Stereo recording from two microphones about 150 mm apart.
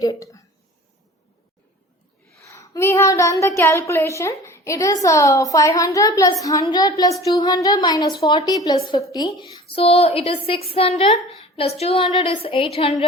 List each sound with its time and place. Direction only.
0.0 s speech: 20° left (ahead or behind)
2.5 s speech: 20° left (ahead or behind)
9.6 s a woman's voice: 40° left (ahead or behind)